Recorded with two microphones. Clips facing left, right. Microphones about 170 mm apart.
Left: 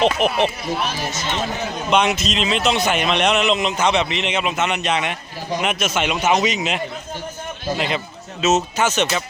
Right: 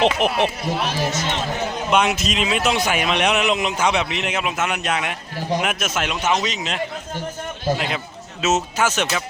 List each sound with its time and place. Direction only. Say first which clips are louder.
0.2 s a man's voice: left 1 dB; 10° right (ahead or behind)
1.9 s a man's voice: left 1 dB; 5° right (ahead or behind)
6.1 s a man's voice: left 4 dB; 10° left (ahead or behind)
7.8 s speech: left 3 dB; 5° right (ahead or behind)